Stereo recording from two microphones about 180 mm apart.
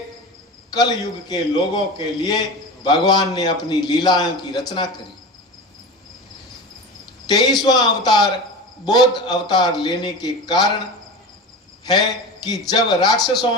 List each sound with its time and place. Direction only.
0.8 s a man's voice: 20° left (ahead or behind)
2.8 s a man's voice: 25° left (ahead or behind)
7.3 s a man's voice: 20° left (ahead or behind)
11.9 s a man's voice: 20° left (ahead or behind)